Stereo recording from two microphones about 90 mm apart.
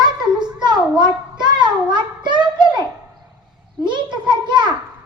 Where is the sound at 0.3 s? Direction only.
55° right (ahead or behind).